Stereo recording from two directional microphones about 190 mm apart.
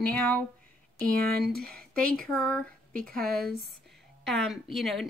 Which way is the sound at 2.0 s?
5° left (ahead or behind).